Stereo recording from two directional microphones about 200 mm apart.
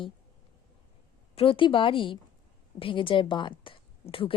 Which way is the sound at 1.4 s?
25° left (ahead or behind).